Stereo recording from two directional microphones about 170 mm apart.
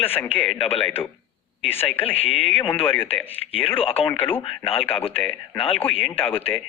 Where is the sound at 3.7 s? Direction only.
35° left (ahead or behind).